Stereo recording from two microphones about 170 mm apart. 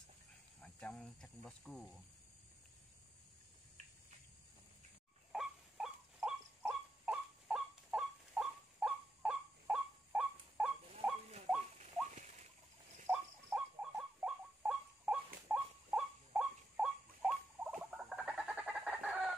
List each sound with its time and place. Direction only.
0.6 s speech: 5° left (ahead or behind)
5.3 s a sound: centre (ahead or behind)
6.6 s fowl: 5° right (ahead or behind)
11.0 s rodents: 5° right (ahead or behind)
11.8 s patter: 45° right (ahead or behind)
13.1 s rodents: 5° right (ahead or behind)
15.4 s a sound: 5° right (ahead or behind)
17.6 s frog: 5° right (ahead or behind)